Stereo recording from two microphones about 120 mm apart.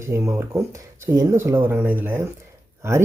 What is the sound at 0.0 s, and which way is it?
Speech, 25° right (ahead or behind).